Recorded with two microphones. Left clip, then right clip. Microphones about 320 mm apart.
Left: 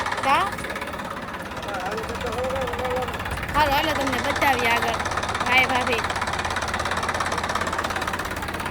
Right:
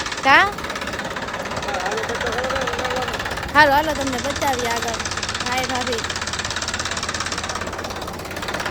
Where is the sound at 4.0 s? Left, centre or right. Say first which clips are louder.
Even; left.